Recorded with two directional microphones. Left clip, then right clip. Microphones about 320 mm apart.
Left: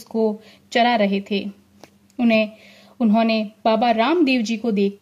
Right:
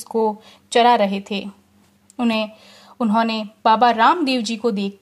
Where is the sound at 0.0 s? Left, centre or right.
Right.